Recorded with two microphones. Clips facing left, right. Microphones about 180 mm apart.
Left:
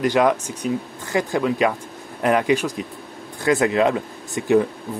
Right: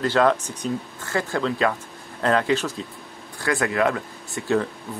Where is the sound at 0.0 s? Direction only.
15° left (ahead or behind).